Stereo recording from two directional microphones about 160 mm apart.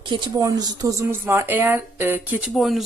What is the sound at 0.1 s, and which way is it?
Speech, 25° right (ahead or behind).